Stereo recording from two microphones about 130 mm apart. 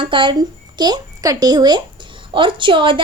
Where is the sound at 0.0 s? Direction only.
40° right (ahead or behind).